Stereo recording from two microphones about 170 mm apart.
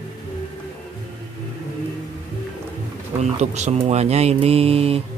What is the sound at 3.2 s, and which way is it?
Speech, 40° right (ahead or behind).